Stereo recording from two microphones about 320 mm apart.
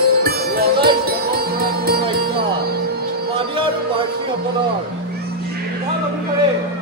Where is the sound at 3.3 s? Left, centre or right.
Centre.